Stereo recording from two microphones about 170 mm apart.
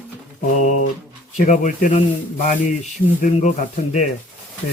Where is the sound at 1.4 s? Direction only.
50° left (ahead or behind).